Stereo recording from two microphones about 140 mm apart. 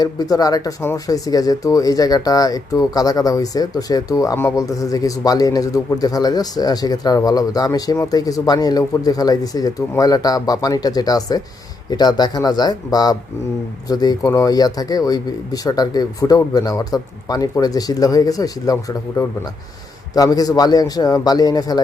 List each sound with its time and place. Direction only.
0.0 s speech: 25° left (ahead or behind)